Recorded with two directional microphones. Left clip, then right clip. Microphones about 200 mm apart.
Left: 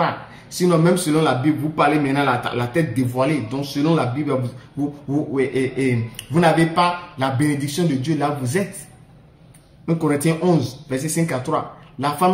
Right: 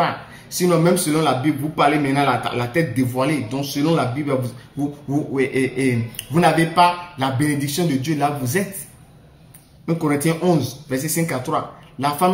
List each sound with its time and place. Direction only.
0.6 s a man's voice: 10° left (ahead or behind)
9.8 s speech: 5° left (ahead or behind)